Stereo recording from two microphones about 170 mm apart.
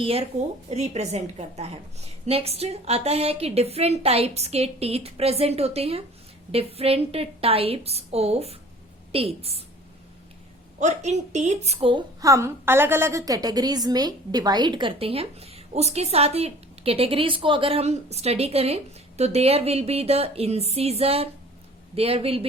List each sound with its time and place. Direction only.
0.0 s a woman's voice: 35° right (ahead or behind)
10.8 s speech: 45° right (ahead or behind)
12.2 s a woman's voice: 15° right (ahead or behind); by 22.4 s 35° right (ahead or behind)